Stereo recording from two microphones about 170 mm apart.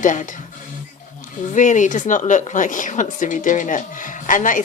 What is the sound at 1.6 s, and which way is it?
Speech, 45° left (ahead or behind).